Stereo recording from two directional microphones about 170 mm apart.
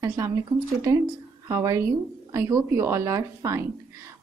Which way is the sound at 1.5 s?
20° right (ahead or behind).